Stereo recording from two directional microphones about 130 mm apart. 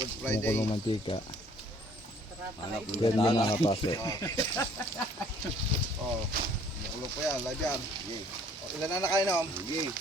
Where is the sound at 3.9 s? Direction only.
25° left (ahead or behind).